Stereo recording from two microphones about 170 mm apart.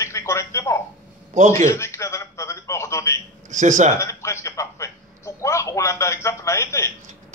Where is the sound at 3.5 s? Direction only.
45° right (ahead or behind).